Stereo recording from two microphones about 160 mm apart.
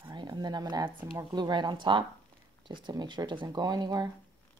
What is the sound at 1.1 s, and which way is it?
Speech, 25° right (ahead or behind).